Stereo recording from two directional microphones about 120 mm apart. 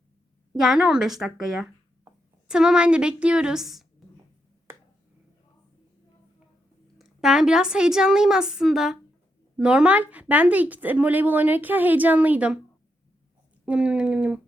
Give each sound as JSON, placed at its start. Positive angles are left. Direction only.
{"t": 0.6, "sound": "a woman's voice", "side_deg": -5}
{"t": 4.7, "sound": "finger snapping", "side_deg": -20}
{"t": 7.0, "sound": "a woman's voice", "side_deg": -5}
{"t": 13.7, "sound": "speech", "side_deg": -10}